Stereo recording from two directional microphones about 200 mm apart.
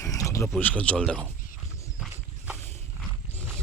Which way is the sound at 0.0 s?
15° left (ahead or behind).